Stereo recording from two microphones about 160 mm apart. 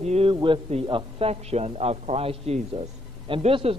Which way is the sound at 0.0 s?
40° right (ahead or behind).